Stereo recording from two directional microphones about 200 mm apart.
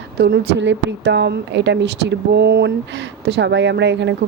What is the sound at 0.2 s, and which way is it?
A woman's voice, 60° right (ahead or behind).